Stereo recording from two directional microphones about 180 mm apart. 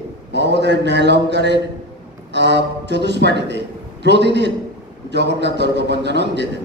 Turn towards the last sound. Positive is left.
turn(degrees=-70)  # may be behind; listen again after turning